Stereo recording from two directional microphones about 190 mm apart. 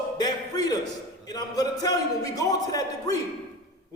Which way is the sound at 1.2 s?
20° left (ahead or behind).